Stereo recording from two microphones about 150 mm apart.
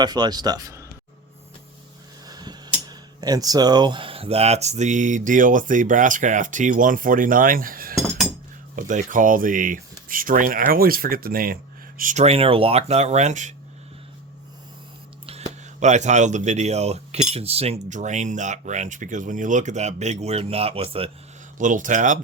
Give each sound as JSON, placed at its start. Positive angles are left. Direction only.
{"t": 0.0, "sound": "speech", "side_deg": -25}
{"t": 2.2, "sound": "speech", "side_deg": -25}
{"t": 8.7, "sound": "speech", "side_deg": -60}
{"t": 11.9, "sound": "speech", "side_deg": -55}
{"t": 15.3, "sound": "speech", "side_deg": -50}
{"t": 21.6, "sound": "speech", "side_deg": -60}